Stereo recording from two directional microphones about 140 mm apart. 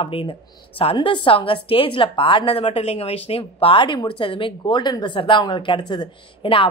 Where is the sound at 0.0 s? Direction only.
40° left (ahead or behind).